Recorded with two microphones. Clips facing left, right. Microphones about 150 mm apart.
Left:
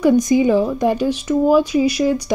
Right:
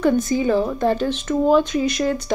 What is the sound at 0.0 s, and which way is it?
Speech, 15° left (ahead or behind).